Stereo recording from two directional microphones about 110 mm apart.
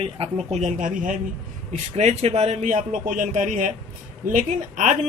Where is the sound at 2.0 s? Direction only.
80° right.